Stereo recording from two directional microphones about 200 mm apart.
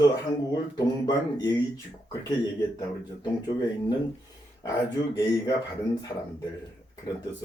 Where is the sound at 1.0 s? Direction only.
20° left (ahead or behind).